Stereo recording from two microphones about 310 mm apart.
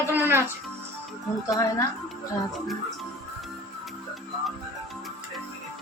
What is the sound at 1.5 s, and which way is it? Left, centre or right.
Speech, centre.